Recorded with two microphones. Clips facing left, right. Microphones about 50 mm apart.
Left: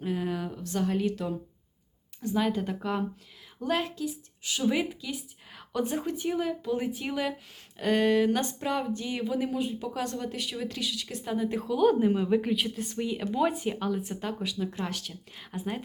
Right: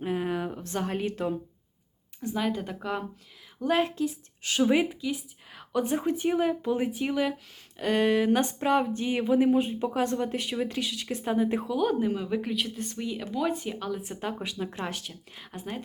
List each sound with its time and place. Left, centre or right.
0.0 s a sound: right
2.2 s speech: centre
3.8 s speech: right
4.9 s speech: centre
6.1 s speech: right
6.7 s speech: centre
8.6 s speech: right
11.7 s speech: centre
14.0 s speech: centre
14.3 s speech: right
15.1 s speech: centre